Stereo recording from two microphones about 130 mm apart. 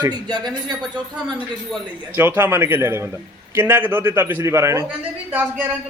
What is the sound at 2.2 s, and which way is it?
A man's voice, 15° right (ahead or behind).